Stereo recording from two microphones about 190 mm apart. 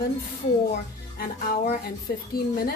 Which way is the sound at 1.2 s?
50° left (ahead or behind).